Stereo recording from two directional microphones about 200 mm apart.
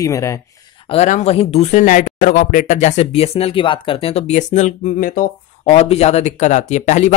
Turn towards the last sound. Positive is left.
turn(degrees=35)  # may be behind; listen again after turning